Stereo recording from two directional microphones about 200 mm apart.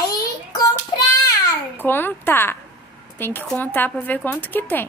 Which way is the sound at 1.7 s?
10° left (ahead or behind).